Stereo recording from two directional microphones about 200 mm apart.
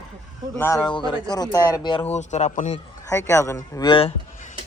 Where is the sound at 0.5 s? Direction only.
15° left (ahead or behind).